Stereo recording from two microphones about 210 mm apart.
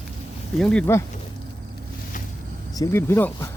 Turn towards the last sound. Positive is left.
turn(degrees=10)  # may be behind; listen again after turning